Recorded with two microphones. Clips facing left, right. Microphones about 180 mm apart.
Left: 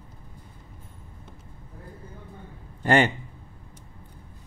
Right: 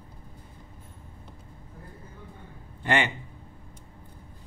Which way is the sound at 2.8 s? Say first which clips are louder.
Left 5 dB; 45° left (ahead or behind).